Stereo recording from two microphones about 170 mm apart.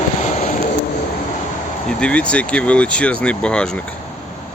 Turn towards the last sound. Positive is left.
turn(degrees=5)  # may be behind; listen again after turning